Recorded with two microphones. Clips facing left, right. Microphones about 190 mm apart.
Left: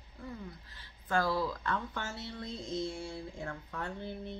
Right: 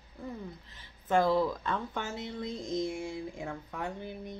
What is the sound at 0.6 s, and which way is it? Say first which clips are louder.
Speech: right 5 dB; 20° right (ahead or behind).